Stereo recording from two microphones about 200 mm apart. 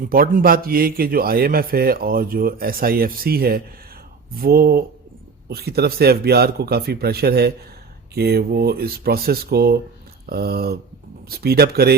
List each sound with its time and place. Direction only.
0.1 s a man's voice: 45° right (ahead or behind)